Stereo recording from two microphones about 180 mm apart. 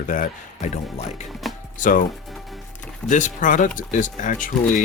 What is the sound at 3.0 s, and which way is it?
Speech, 45° left (ahead or behind).